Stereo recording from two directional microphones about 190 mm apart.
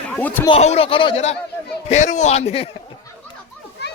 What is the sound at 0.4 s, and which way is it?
Speech, 30° left (ahead or behind).